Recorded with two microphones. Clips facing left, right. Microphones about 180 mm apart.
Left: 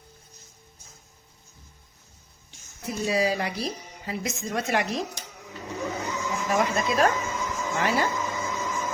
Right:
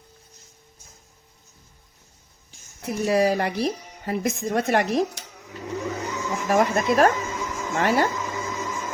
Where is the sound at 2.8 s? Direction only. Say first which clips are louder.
Right 5 dB; 60° right (ahead or behind).